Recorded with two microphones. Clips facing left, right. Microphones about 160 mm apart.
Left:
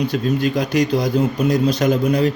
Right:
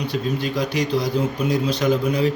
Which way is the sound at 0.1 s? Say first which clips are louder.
Left 5 dB; 50° left (ahead or behind).